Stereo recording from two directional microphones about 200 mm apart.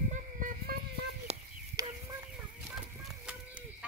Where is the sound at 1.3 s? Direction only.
30° right (ahead or behind).